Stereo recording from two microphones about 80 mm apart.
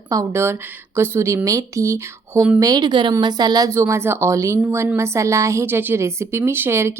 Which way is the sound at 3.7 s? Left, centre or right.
Right.